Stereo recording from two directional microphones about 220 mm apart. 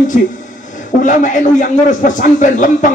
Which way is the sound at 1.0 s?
35° left (ahead or behind).